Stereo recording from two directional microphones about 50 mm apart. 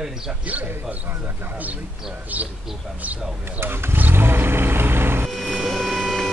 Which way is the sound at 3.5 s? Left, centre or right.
Right.